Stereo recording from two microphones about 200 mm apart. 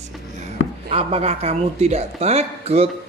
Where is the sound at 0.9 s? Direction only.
30° right (ahead or behind).